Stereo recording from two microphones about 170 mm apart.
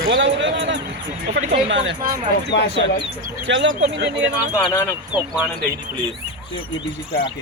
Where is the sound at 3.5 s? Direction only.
90° right.